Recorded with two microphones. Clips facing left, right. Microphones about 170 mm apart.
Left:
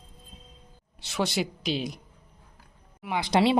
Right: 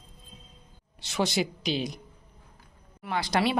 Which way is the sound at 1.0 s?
Centre (ahead or behind).